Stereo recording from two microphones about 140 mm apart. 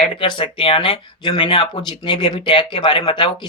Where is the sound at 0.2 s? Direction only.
40° left (ahead or behind).